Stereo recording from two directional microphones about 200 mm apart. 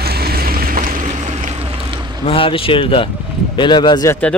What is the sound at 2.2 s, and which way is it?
Speech, 25° left (ahead or behind).